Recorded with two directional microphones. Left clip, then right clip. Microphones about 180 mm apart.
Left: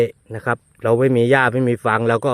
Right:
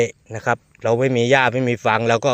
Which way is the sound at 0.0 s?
35° left (ahead or behind).